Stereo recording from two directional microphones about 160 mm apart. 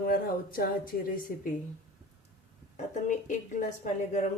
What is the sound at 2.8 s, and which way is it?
A woman's voice, 50° left (ahead or behind).